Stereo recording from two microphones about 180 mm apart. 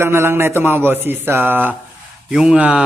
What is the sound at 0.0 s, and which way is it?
Speech, 15° right (ahead or behind).